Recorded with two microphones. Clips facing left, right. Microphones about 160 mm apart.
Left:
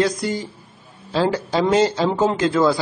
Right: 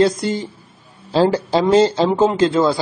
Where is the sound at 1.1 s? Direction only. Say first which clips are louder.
Right 5 dB; 30° right (ahead or behind).